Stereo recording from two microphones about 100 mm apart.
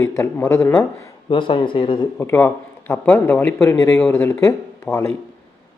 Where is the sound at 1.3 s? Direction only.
60° left (ahead or behind).